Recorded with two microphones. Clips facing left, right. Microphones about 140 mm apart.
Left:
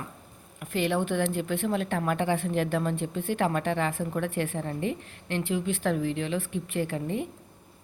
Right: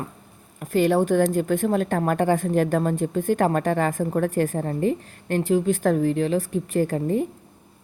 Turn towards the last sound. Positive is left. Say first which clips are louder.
# right 7 dB
turn(degrees=-40)  # may be behind; listen again after turning